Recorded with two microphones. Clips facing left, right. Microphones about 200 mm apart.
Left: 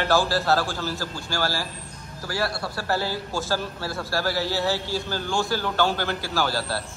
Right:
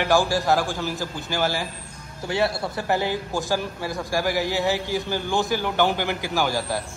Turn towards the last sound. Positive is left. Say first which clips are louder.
# right 2 dB
turn(degrees=-15)  # may be behind; listen again after turning